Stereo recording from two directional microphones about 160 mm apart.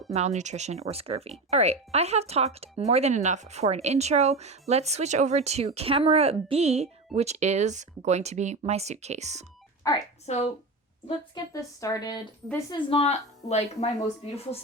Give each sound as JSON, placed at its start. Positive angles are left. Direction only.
{"t": 0.1, "sound": "speech", "side_deg": -45}
{"t": 9.8, "sound": "a woman's voice", "side_deg": 20}
{"t": 10.2, "sound": "speech", "side_deg": 45}
{"t": 11.5, "sound": "a woman's voice", "side_deg": 20}
{"t": 12.9, "sound": "speech", "side_deg": 40}